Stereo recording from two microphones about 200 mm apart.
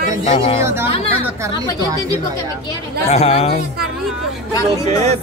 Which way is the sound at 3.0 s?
30° left (ahead or behind).